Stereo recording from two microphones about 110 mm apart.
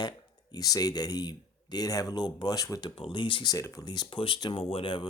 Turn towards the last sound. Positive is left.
turn(degrees=55)  # may be behind; listen again after turning